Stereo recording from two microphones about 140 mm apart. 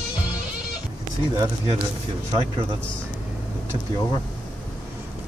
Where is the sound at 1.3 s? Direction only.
25° right (ahead or behind).